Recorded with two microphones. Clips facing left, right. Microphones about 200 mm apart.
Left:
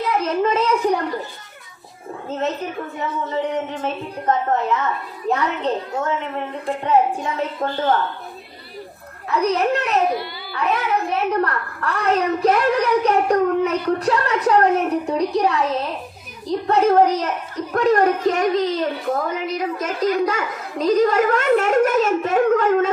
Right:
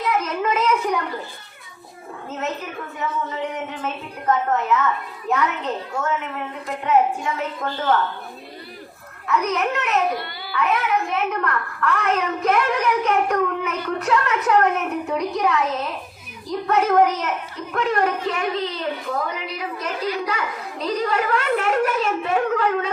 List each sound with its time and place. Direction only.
0.2 s a sound: 30° left (ahead or behind)
3.0 s a child's voice: 35° left (ahead or behind)
9.2 s a child's voice: 35° left (ahead or behind)